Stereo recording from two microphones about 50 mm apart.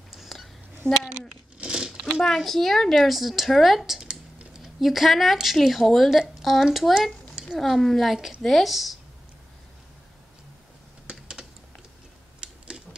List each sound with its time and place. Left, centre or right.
0.1 s whispering: centre
1.6 s crumpling: centre
2.2 s a woman's voice: centre
4.1 s typing: centre
4.7 s a woman's voice: centre
11.1 s typing: centre
12.4 s a sound: centre